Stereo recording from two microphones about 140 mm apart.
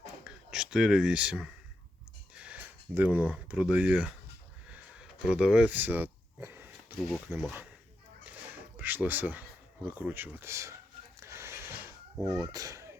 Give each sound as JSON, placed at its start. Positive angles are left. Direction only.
{"t": 0.3, "sound": "speech", "side_deg": -5}
{"t": 4.7, "sound": "a sound", "side_deg": -5}
{"t": 7.3, "sound": "speech", "side_deg": -20}
{"t": 8.8, "sound": "speech", "side_deg": -15}
{"t": 11.2, "sound": "a sound", "side_deg": -20}
{"t": 12.2, "sound": "speech", "side_deg": -30}